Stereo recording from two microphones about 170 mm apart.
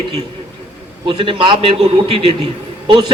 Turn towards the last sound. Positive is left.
turn(degrees=-30)  # may be behind; listen again after turning